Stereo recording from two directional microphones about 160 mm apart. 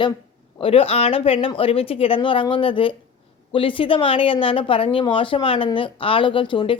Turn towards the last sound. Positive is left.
turn(degrees=30)  # may be behind; listen again after turning